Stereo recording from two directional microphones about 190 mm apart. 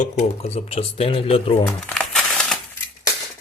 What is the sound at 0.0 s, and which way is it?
Speech, 35° left (ahead or behind).